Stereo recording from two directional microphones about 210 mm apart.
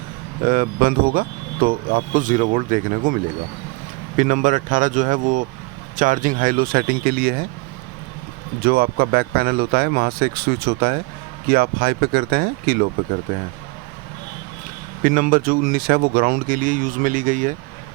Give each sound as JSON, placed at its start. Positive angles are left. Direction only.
{"t": 0.4, "sound": "speech", "side_deg": -45}
{"t": 4.2, "sound": "speech", "side_deg": -35}
{"t": 8.6, "sound": "speech", "side_deg": -45}
{"t": 15.0, "sound": "speech", "side_deg": -40}